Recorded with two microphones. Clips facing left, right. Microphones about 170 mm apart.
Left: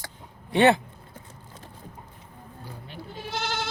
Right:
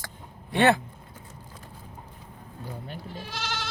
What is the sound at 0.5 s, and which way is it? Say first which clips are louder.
Speech: left 2 dB; 20° left (ahead or behind).